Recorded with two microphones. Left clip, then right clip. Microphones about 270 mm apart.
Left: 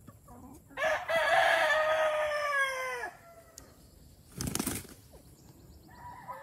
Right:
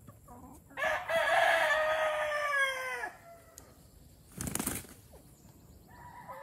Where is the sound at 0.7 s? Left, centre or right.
Centre.